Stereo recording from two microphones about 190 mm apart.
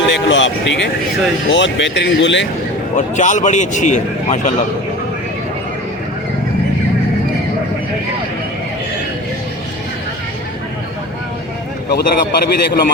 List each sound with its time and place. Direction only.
0.1 s speech: 75° left (ahead or behind)
2.9 s a man's voice: 40° left (ahead or behind)
11.9 s a man's voice: 55° left (ahead or behind)